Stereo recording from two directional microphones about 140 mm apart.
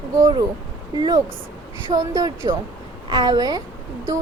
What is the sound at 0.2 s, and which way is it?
A woman's voice, 30° right (ahead or behind).